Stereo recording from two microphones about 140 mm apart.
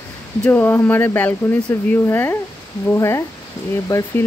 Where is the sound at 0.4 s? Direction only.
15° left (ahead or behind).